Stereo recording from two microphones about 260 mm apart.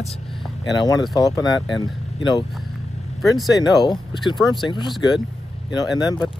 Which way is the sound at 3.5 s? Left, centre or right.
Centre.